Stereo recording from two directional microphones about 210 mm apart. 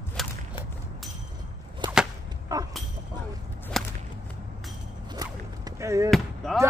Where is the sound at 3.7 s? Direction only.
Centre (ahead or behind).